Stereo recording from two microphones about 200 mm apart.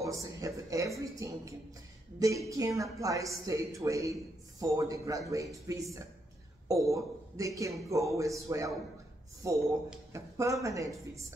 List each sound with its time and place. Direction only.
0.0 s a woman's voice: 15° right (ahead or behind)
10.1 s a woman's voice: 15° right (ahead or behind)